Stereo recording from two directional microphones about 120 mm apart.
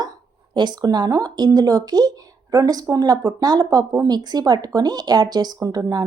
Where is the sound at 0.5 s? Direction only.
35° right (ahead or behind).